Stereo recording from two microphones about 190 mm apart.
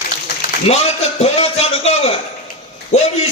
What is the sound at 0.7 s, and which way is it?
A man's voice, 35° left (ahead or behind).